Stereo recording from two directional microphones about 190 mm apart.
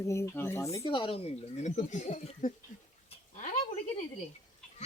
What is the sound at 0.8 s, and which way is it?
Speech, 25° left (ahead or behind).